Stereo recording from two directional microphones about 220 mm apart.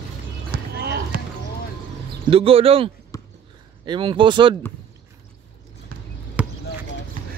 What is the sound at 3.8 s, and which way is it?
Speech, 20° right (ahead or behind).